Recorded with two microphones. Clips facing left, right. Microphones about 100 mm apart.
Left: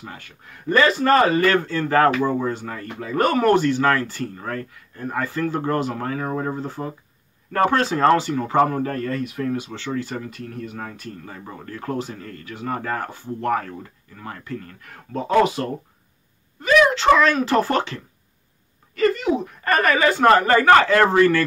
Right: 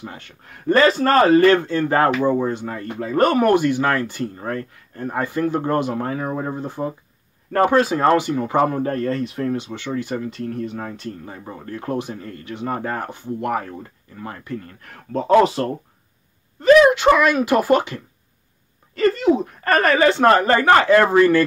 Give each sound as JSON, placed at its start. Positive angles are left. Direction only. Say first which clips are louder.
{"t": 0.7, "sound": "speech", "louder": "right 2 dB", "side_deg": -35}
{"t": 5.2, "sound": "speech", "louder": "right 3 dB", "side_deg": -20}
{"t": 9.8, "sound": "speech", "louder": "right 2 dB", "side_deg": -20}
{"t": 10.3, "sound": "speech", "louder": "right 6 dB", "side_deg": -30}
{"t": 14.8, "sound": "speech", "louder": "right 6 dB", "side_deg": -35}
{"t": 16.9, "sound": "speech", "louder": "right 1 dB", "side_deg": -15}
{"t": 18.9, "sound": "speech", "louder": "right 3 dB", "side_deg": -35}
{"t": 20.8, "sound": "speech", "louder": "right 2 dB", "side_deg": -20}